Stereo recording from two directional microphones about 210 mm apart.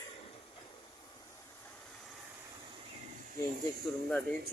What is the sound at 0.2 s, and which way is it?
Train, 25° left (ahead or behind).